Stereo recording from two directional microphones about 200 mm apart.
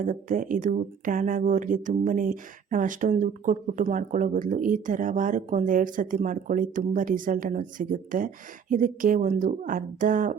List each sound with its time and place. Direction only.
0.0 s speech: 40° right (ahead or behind)